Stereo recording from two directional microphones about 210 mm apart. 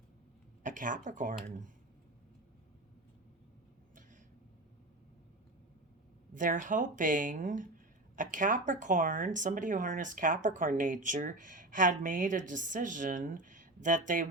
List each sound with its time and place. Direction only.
0.6 s speech: 40° right (ahead or behind)
6.3 s speech: 40° right (ahead or behind)